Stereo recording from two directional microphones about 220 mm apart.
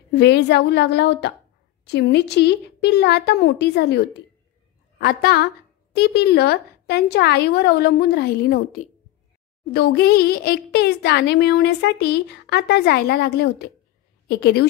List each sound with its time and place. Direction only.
0.1 s a woman's voice: 50° left (ahead or behind)